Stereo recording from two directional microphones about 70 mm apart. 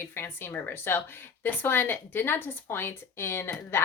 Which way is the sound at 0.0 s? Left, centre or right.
Left.